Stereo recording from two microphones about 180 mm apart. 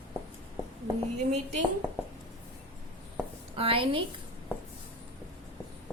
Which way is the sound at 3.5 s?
30° right (ahead or behind).